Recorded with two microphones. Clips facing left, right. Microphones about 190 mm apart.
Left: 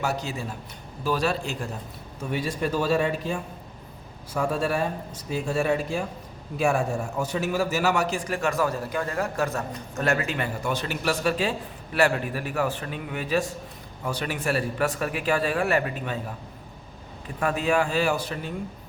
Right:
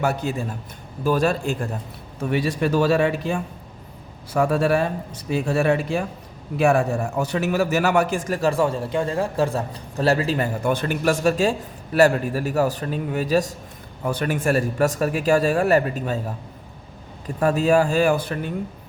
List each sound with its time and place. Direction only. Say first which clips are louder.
0.0 s a man's voice: right 5 dB; 55° right (ahead or behind)
2.3 s speech: right 5 dB; 75° right (ahead or behind)
4.4 s a man's voice: right 6 dB; 70° right (ahead or behind); by 10.5 s 35° right (ahead or behind)
10.6 s a man's voice: right 6 dB; 55° right (ahead or behind)
14.1 s a man's voice: right 6 dB; 50° right (ahead or behind)
17.2 s a man's voice: right 6 dB; 40° right (ahead or behind)